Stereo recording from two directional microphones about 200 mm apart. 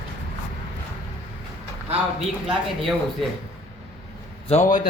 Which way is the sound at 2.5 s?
Centre (ahead or behind).